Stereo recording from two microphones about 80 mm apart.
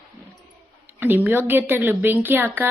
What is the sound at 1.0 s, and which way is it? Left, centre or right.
A woman's voice, right.